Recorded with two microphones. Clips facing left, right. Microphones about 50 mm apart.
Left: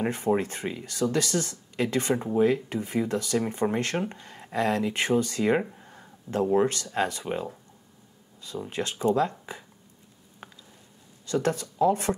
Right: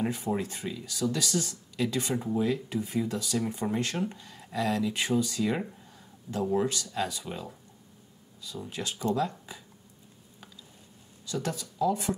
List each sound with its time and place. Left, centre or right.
0.0 s speech: left
8.5 s speech: left
11.2 s speech: left